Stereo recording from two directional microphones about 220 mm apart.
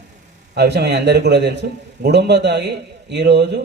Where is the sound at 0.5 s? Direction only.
50° right (ahead or behind).